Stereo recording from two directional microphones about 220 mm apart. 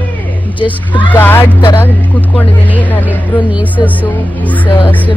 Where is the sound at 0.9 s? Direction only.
10° left (ahead or behind).